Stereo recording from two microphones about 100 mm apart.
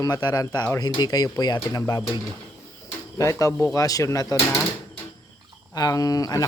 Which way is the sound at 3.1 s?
30° left (ahead or behind).